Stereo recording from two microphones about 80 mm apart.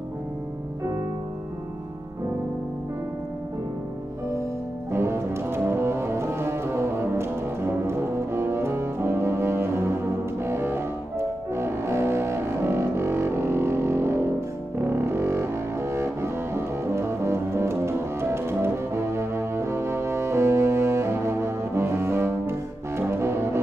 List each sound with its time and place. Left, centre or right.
4.9 s music: right